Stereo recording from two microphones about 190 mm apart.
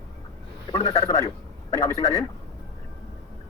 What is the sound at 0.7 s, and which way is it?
Speech, 30° left (ahead or behind).